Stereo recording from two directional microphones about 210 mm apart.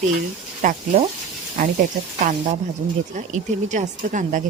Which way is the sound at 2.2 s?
40° right (ahead or behind).